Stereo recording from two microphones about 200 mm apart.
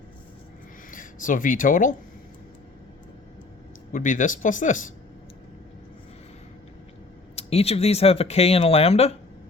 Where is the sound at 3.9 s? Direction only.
40° left (ahead or behind).